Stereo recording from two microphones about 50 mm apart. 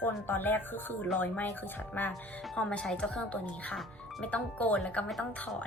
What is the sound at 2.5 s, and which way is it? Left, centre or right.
Speech, left.